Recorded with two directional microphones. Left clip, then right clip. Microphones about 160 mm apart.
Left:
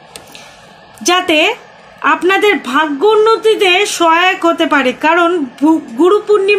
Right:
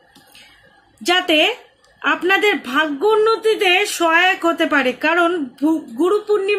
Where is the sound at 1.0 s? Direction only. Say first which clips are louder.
Left 4 dB; 20° left (ahead or behind).